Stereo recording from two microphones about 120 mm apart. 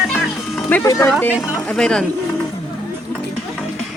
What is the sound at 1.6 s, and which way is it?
Speech, 5° left (ahead or behind).